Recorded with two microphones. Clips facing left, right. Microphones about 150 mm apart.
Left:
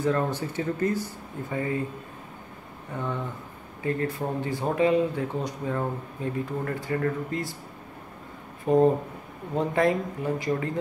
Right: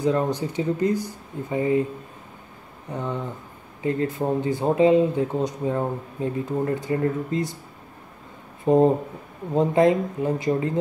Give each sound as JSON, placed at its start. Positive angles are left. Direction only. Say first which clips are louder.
{"t": 0.0, "sound": "speech", "louder": "right 3 dB", "side_deg": -15}
{"t": 2.9, "sound": "speech", "louder": "right 3 dB", "side_deg": -20}
{"t": 8.6, "sound": "speech", "louder": "right 3 dB", "side_deg": -25}